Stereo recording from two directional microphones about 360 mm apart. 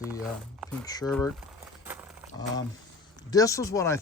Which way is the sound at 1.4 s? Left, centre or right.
Centre.